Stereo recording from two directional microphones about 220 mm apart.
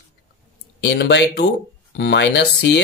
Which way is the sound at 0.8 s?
50° left (ahead or behind).